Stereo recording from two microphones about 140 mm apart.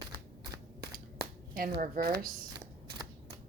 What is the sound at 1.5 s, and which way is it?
Speech, 85° right.